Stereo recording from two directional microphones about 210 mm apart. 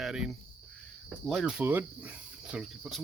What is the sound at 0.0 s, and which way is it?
Cricket, centre (ahead or behind).